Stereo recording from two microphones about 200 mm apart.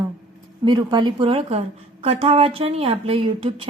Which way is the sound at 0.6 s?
20° right (ahead or behind).